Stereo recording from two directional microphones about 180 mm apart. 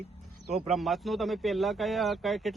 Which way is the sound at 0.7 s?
Centre (ahead or behind).